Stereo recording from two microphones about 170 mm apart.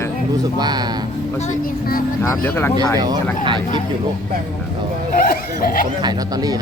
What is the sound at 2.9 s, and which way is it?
Speech, 25° right (ahead or behind).